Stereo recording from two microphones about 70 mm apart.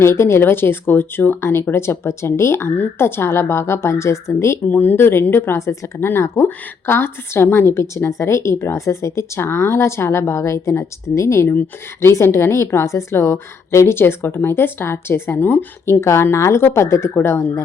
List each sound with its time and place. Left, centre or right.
0.0 s speech: left
4.7 s speech: left
15.9 s speech: left